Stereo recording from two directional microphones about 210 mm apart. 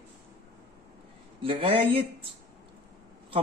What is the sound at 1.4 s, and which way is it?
A man's voice, 25° right (ahead or behind).